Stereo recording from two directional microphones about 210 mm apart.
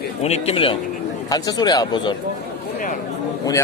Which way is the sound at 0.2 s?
30° left (ahead or behind).